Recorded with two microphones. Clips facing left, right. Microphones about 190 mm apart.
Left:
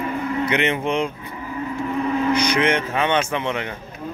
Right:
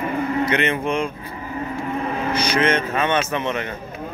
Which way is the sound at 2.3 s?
15° left (ahead or behind).